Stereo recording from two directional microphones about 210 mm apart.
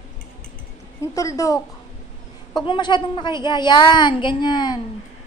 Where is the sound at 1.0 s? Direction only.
15° left (ahead or behind).